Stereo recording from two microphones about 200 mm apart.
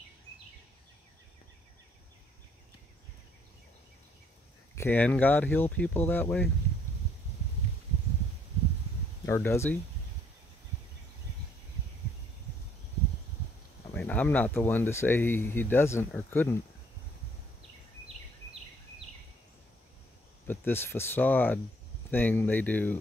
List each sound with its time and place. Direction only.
4.7 s speech: 10° left (ahead or behind)
9.2 s speech: 15° left (ahead or behind)
13.9 s speech: 5° left (ahead or behind)
17.6 s a sound: 30° right (ahead or behind)
20.4 s speech: 10° left (ahead or behind)